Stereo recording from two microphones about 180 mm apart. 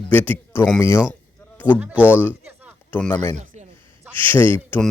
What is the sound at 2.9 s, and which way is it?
Speech, 10° left (ahead or behind).